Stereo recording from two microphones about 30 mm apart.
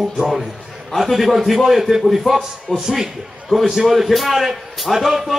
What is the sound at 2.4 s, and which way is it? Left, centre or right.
Speech, centre.